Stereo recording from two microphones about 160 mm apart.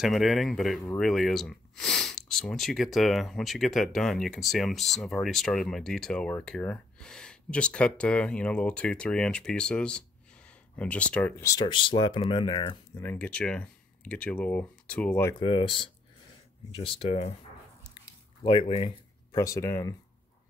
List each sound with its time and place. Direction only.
0.0 s speech: centre (ahead or behind); by 11.6 s 15° left (ahead or behind)
11.6 s speech: 30° left (ahead or behind)
12.9 s speech: 15° left (ahead or behind)
15.4 s speech: 30° left (ahead or behind)
17.9 s a sound: 30° left (ahead or behind)
19.3 s speech: 20° left (ahead or behind)